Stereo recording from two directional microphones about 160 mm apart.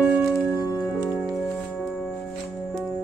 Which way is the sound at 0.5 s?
25° left (ahead or behind).